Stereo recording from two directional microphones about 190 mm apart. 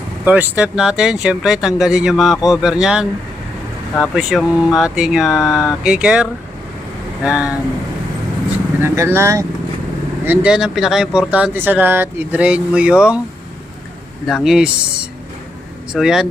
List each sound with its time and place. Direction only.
0.3 s speech: 5° right (ahead or behind)
4.1 s speech: centre (ahead or behind)
5.5 s speech: 15° left (ahead or behind)
5.8 s speech: 5° right (ahead or behind)
8.8 s speech: 15° right (ahead or behind)
10.2 s speech: 5° right (ahead or behind)
14.3 s speech: centre (ahead or behind)